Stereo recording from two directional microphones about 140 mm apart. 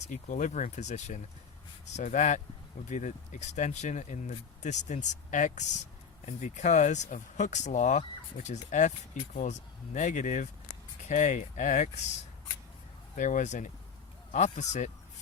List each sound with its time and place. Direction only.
0.1 s speech: 65° left (ahead or behind)
13.1 s speech: 65° left (ahead or behind)